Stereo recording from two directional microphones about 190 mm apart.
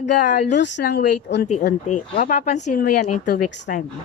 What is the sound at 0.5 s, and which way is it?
Speech, 65° left (ahead or behind).